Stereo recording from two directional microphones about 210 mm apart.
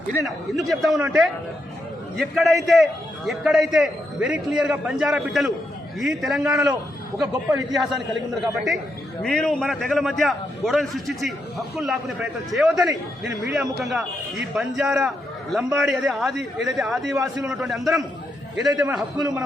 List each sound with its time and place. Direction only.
0.3 s a man's voice: centre (ahead or behind)
18.7 s a man's voice: 20° right (ahead or behind)